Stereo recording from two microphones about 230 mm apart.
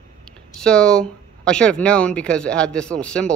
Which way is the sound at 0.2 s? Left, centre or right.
Centre.